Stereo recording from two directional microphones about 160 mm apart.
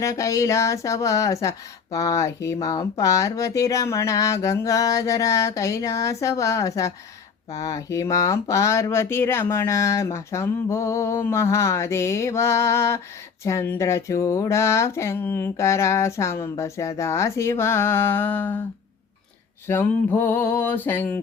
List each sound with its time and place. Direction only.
0.0 s a sound: 20° left (ahead or behind)
7.5 s speech: 20° left (ahead or behind)
19.6 s speech: 15° left (ahead or behind)